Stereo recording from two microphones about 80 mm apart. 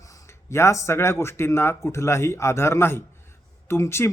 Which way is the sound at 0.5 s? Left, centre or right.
Left.